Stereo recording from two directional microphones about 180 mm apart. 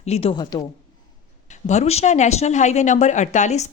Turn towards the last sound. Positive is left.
turn(degrees=40)  # may be behind; listen again after turning